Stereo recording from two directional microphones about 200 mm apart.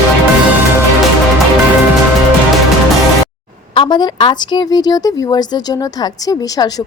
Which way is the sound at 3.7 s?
20° left (ahead or behind).